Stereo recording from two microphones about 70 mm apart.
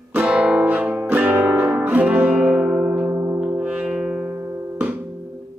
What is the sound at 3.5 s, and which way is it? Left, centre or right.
Brass instrument, centre.